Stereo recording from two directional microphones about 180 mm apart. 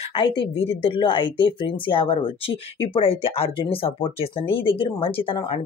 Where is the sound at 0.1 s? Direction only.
30° left (ahead or behind).